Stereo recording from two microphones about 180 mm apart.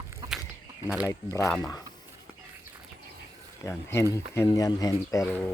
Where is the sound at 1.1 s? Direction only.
15° left (ahead or behind).